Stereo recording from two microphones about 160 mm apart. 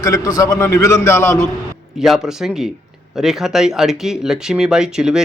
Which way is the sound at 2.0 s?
5° right (ahead or behind).